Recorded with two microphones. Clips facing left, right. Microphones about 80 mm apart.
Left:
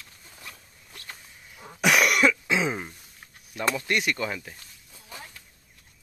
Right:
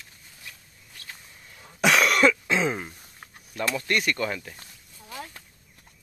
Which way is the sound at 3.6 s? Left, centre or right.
Centre.